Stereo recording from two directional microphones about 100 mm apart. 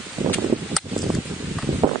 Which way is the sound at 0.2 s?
25° right (ahead or behind).